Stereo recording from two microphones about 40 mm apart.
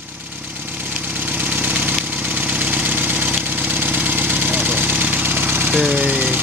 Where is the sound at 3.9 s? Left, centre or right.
Right.